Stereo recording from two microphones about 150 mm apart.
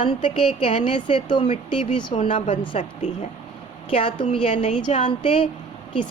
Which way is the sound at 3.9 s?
35° left (ahead or behind).